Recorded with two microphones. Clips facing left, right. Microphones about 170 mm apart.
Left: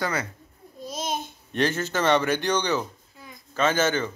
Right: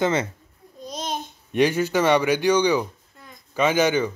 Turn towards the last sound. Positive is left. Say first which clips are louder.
# right 3 dB
turn(degrees=-10)  # may be behind; listen again after turning